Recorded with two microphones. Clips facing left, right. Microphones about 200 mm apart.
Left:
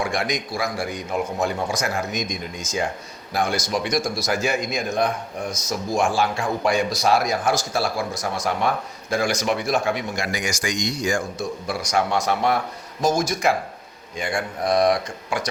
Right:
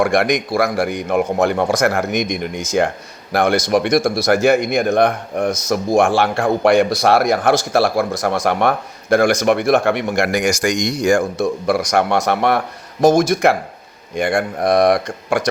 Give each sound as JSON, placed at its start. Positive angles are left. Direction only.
{"t": 0.0, "sound": "a man's voice", "side_deg": -75}
{"t": 14.2, "sound": "speech", "side_deg": -75}